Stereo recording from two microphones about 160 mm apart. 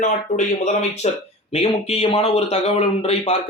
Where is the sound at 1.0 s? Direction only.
45° left (ahead or behind).